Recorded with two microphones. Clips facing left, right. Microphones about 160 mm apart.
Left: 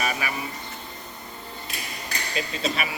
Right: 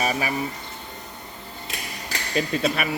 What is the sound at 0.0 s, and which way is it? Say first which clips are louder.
Speech: right 4 dB; 35° right (ahead or behind).